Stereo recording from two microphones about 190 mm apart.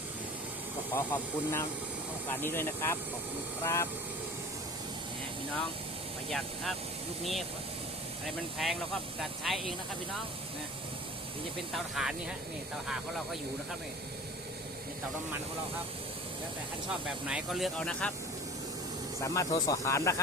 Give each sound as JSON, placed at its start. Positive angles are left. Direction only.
{"t": 0.9, "sound": "speech", "side_deg": 10}
{"t": 6.3, "sound": "speech", "side_deg": 0}
{"t": 8.5, "sound": "speech", "side_deg": 0}
{"t": 11.7, "sound": "speech", "side_deg": 0}
{"t": 17.2, "sound": "speech", "side_deg": -5}
{"t": 19.2, "sound": "speech", "side_deg": 15}